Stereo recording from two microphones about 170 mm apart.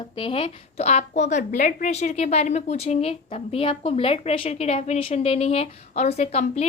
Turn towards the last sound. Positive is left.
turn(degrees=40)  # may be behind; listen again after turning